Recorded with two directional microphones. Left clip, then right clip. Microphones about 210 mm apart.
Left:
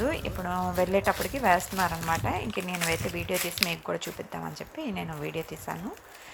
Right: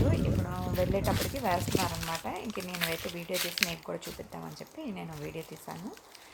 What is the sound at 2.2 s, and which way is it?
Speech, 15° left (ahead or behind).